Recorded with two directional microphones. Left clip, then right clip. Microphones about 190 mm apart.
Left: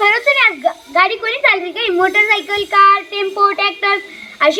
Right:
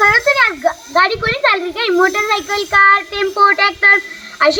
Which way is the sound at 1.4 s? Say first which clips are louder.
Left 2 dB; 30° left (ahead or behind).